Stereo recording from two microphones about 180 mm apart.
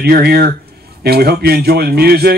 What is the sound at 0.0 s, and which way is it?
Speech, 60° right (ahead or behind).